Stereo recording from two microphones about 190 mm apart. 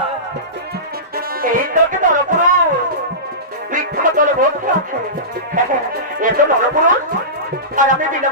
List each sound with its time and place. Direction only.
1.1 s music: 45° right (ahead or behind)
3.7 s music: 45° right (ahead or behind)
5.6 s speech: 45° right (ahead or behind)